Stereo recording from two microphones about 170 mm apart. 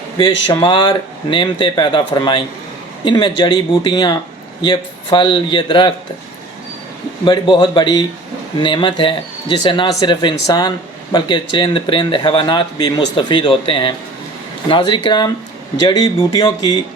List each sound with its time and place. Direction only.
0.2 s speech: 25° left (ahead or behind)
7.3 s speech: 30° left (ahead or behind)